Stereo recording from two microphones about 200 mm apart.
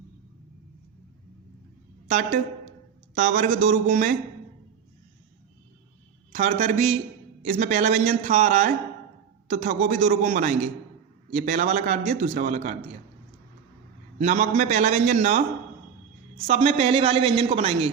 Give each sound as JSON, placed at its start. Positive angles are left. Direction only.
{"t": 2.0, "sound": "a man's voice", "side_deg": -35}
{"t": 6.3, "sound": "a man's voice", "side_deg": -35}
{"t": 14.2, "sound": "a man's voice", "side_deg": -35}
{"t": 16.5, "sound": "a man's voice", "side_deg": -30}